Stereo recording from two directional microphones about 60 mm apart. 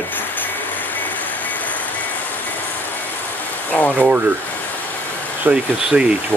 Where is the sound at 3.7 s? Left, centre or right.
Left.